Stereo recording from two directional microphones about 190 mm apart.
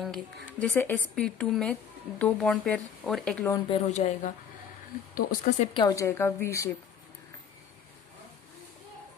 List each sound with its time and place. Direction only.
0.0 s speech: 5° left (ahead or behind)
3.7 s speech: 35° left (ahead or behind)
5.1 s speech: 50° left (ahead or behind)
5.7 s a woman's voice: 20° left (ahead or behind)